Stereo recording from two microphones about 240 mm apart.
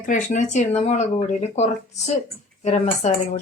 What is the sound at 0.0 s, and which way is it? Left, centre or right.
Speech, left.